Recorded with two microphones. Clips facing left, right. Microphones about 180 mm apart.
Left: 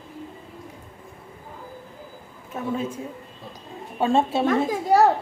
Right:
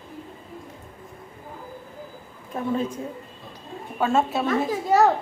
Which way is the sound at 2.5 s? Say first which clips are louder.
Right 2 dB; 5° left (ahead or behind).